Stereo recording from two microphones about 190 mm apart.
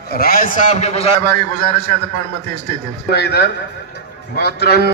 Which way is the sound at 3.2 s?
60° left (ahead or behind).